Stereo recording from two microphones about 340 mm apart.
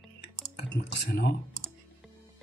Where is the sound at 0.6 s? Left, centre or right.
Left.